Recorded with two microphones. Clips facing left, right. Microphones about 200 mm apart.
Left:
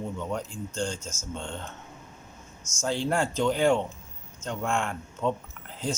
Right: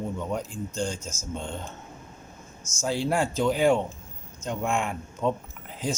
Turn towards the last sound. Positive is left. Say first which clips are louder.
# right 1 dB
turn(degrees=-10)  # may be behind; listen again after turning